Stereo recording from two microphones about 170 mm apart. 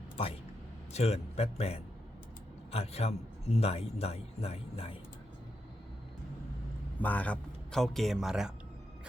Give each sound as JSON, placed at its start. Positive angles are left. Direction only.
{"t": 0.9, "sound": "a man's voice", "side_deg": 35}
{"t": 7.0, "sound": "a man's voice", "side_deg": 10}